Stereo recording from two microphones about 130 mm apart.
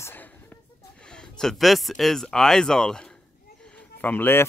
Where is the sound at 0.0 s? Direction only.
15° left (ahead or behind).